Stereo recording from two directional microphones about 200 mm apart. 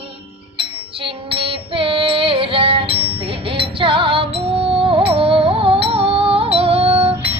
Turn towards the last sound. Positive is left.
turn(degrees=-30)  # may be behind; listen again after turning